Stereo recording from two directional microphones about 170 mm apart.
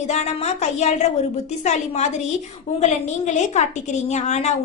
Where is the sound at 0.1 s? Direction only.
40° left (ahead or behind).